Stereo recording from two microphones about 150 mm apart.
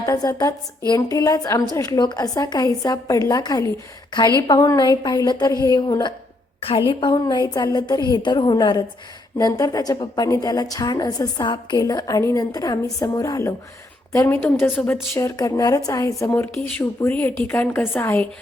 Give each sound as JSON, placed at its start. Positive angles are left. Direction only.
{"t": 0.0, "sound": "a woman's voice", "side_deg": 25}
{"t": 15.1, "sound": "a woman's voice", "side_deg": 20}